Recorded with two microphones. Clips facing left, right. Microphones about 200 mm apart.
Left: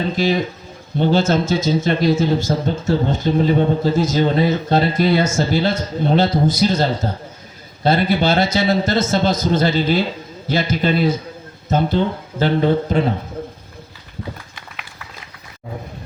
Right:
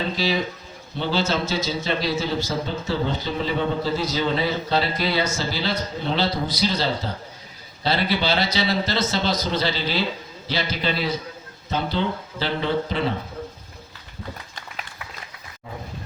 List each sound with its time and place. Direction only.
0.2 s a man's voice: 50° left (ahead or behind)